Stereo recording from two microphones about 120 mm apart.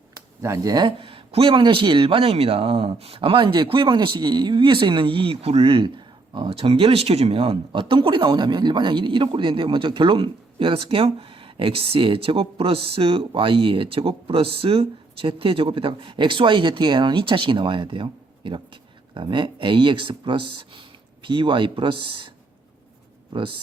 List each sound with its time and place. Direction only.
0.1 s speech: 30° right (ahead or behind); by 22.3 s 45° right (ahead or behind)
23.3 s speech: 45° right (ahead or behind)